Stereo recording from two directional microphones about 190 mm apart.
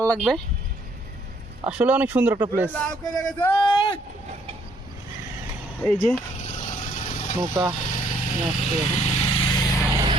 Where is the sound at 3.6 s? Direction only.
25° left (ahead or behind).